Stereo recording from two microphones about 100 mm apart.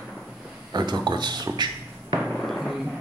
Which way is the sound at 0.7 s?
45° right (ahead or behind).